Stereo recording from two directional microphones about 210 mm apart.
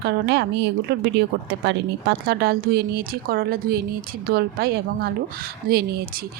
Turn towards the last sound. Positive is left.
turn(degrees=-50)  # may be behind; listen again after turning